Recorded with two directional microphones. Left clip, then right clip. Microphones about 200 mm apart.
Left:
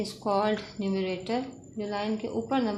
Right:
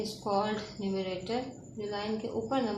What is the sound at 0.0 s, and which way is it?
Speech, 50° left (ahead or behind).